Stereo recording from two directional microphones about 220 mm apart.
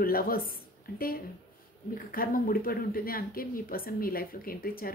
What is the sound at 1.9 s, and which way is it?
A woman's voice, 40° left (ahead or behind).